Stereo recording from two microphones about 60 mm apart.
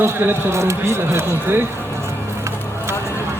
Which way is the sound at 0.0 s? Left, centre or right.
Right.